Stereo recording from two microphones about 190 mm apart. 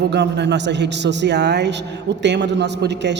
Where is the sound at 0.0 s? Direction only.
65° right (ahead or behind).